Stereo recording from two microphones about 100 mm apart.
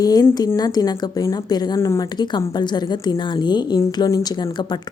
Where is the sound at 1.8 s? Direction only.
30° left (ahead or behind).